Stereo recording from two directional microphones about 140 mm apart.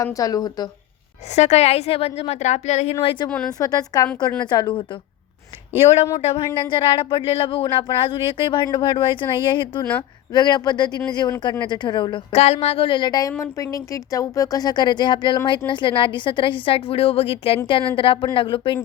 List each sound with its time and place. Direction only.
0.0 s speech: 25° left (ahead or behind)
1.3 s a woman's voice: 55° left (ahead or behind)
3.2 s a woman's voice: 10° left (ahead or behind)
3.6 s speech: 25° left (ahead or behind)
6.2 s speech: 40° left (ahead or behind)
12.3 s speech: 50° left (ahead or behind)